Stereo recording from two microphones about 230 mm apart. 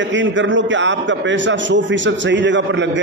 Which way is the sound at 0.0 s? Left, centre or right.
Right.